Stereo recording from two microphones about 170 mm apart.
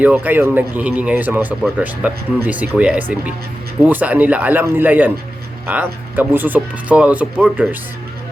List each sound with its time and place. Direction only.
0.0 s speech: 10° right (ahead or behind)